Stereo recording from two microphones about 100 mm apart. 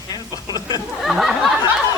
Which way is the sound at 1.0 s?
5° right (ahead or behind).